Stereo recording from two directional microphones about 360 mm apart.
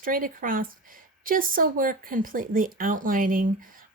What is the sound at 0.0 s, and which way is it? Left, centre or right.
Speech, right.